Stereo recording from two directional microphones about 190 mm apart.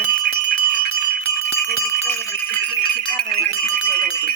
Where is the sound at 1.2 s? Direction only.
10° left (ahead or behind).